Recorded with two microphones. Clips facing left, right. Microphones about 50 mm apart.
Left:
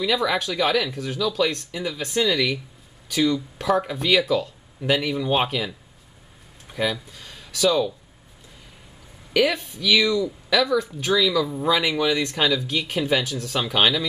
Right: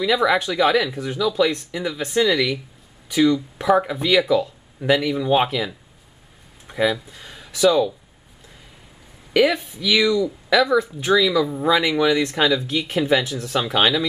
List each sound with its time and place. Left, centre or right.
0.0 s speech: centre
7.6 s speech: centre
9.3 s speech: centre